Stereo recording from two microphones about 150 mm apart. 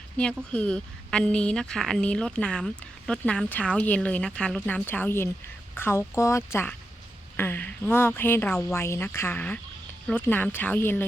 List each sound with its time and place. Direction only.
0.5 s a woman's voice: 5° left (ahead or behind)